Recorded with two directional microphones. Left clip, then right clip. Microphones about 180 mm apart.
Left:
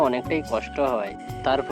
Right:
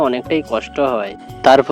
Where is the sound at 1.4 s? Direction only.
50° right (ahead or behind).